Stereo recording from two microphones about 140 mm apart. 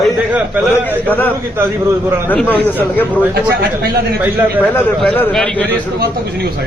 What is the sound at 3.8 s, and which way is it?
Speech, 90° right.